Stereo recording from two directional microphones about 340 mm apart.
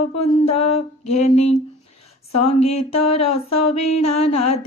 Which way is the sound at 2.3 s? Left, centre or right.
Left.